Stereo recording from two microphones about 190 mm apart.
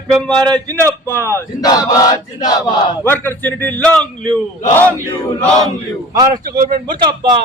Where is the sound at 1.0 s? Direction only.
10° left (ahead or behind).